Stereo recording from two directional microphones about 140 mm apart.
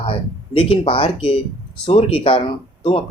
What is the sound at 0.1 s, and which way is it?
Speech, 40° left (ahead or behind).